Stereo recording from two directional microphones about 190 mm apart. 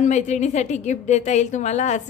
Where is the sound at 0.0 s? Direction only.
35° left (ahead or behind).